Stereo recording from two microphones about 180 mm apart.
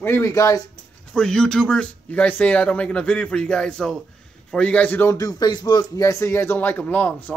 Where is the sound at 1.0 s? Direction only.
5° left (ahead or behind).